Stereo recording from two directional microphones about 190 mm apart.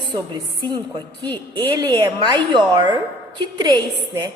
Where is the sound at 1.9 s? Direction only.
25° right (ahead or behind).